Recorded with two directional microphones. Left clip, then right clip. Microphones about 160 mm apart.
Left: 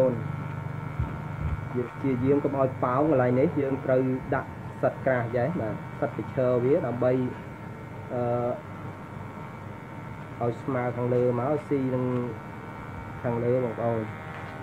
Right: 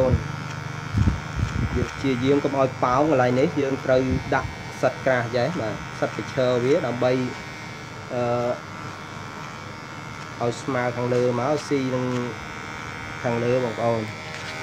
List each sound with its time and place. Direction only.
2.0 s speech: 35° right (ahead or behind)
8.2 s speech: 30° right (ahead or behind)
10.4 s speech: 30° right (ahead or behind)
13.2 s speech: 40° right (ahead or behind)